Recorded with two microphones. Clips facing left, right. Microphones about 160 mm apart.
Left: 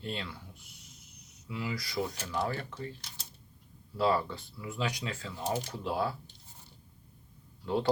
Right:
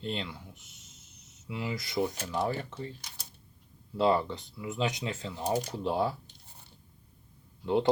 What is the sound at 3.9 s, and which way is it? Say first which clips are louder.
Speech: right 3 dB; 20° right (ahead or behind).